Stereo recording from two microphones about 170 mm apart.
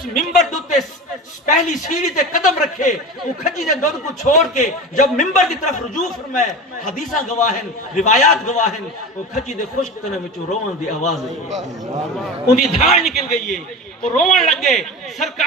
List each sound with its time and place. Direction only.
0.1 s a man's voice: centre (ahead or behind)
0.5 s a man's voice: 45° left (ahead or behind)
12.2 s a man's voice: centre (ahead or behind)
14.2 s a man's voice: centre (ahead or behind)